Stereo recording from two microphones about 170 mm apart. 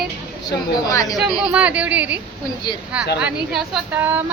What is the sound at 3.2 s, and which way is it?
A woman's voice, 10° right (ahead or behind).